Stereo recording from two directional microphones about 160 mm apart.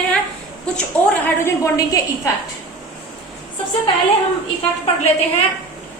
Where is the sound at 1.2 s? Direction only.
15° left (ahead or behind).